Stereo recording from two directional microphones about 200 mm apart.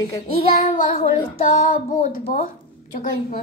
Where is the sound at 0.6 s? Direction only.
45° left (ahead or behind).